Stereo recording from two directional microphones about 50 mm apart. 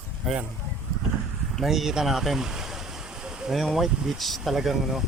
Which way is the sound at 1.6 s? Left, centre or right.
Centre.